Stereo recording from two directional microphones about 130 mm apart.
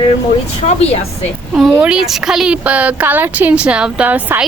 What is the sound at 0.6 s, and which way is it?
Speech, 55° left (ahead or behind).